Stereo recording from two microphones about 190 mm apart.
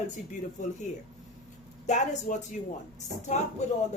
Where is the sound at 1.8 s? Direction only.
40° left (ahead or behind).